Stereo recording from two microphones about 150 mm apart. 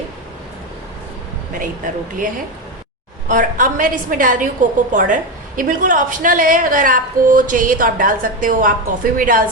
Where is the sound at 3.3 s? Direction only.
65° right (ahead or behind).